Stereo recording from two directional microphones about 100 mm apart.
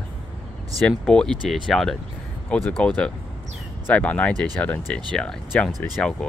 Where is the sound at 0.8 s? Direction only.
10° left (ahead or behind).